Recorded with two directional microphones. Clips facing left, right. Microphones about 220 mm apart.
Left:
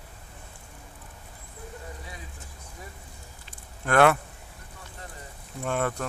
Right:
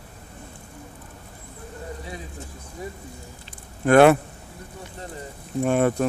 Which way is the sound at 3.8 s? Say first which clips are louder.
Right 7 dB; 20° right (ahead or behind).